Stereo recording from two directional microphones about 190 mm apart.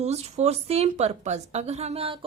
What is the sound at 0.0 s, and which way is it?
A woman's voice, 35° right (ahead or behind).